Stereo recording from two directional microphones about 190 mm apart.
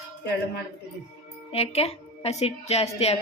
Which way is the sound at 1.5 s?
30° left (ahead or behind).